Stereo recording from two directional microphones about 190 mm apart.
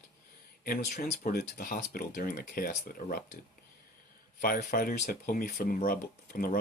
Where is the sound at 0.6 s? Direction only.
50° left (ahead or behind).